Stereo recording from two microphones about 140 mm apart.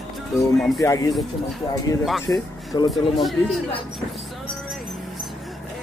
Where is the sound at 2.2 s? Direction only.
30° left (ahead or behind).